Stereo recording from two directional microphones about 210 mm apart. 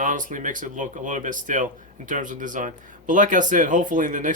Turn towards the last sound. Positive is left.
turn(degrees=-40)  # may be behind; listen again after turning